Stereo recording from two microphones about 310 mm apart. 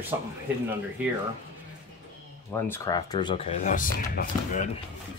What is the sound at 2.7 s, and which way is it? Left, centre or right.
Speech, centre.